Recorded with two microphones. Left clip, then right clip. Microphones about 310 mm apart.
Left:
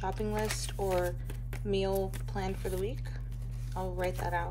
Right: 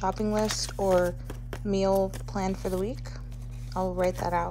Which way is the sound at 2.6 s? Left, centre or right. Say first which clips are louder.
Right 5 dB; right.